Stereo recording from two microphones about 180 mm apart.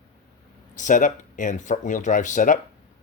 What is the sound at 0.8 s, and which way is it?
Speech, 45° left (ahead or behind).